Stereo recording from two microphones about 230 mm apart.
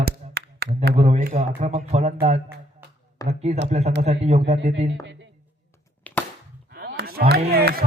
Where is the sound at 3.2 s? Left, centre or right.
Right.